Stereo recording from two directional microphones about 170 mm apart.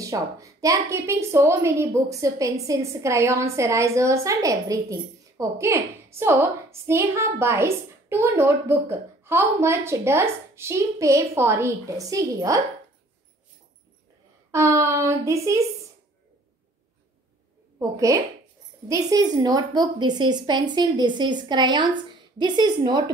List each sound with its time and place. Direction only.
0.0 s a woman's voice: 20° right (ahead or behind)
14.5 s a woman's voice: 15° right (ahead or behind)
17.7 s a woman's voice: 20° right (ahead or behind)